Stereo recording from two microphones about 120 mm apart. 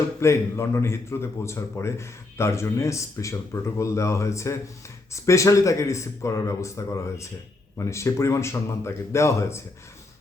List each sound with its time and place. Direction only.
0.2 s speech: 20° left (ahead or behind)